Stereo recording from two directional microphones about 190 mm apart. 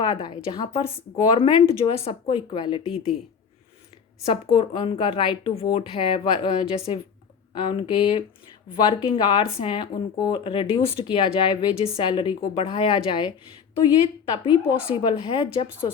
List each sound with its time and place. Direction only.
0.0 s speech: 25° left (ahead or behind)
4.3 s speech: 30° left (ahead or behind)